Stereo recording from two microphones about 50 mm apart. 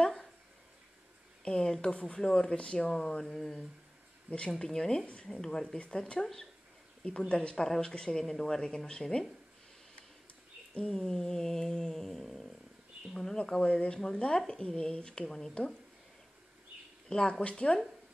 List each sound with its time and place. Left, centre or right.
0.0 s a sound: centre
1.4 s speech: centre
2.2 s speech: centre
2.5 s speech: left
7.6 s speech: centre
10.9 s a sound: centre
13.1 s speech: centre
17.1 s speech: centre